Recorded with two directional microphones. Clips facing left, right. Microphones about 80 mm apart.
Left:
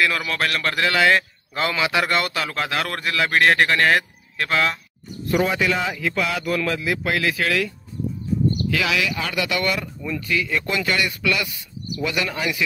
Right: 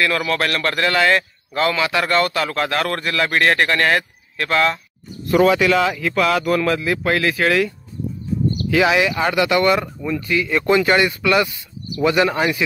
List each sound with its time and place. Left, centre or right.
0.2 s a man's voice: centre
1.5 s a man's voice: centre
5.3 s speech: right
6.5 s speech: right